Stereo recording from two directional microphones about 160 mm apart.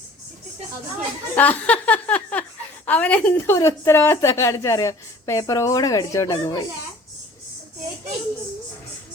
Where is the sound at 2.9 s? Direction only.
10° left (ahead or behind).